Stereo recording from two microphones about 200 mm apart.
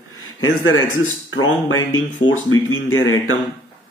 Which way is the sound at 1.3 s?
90° left.